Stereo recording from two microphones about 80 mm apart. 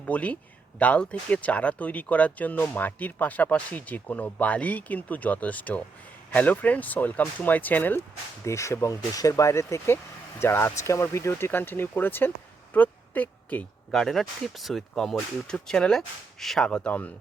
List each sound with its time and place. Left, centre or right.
0.0 s speech: centre
8.4 s speech: left
12.7 s a sound: left
13.9 s speech: centre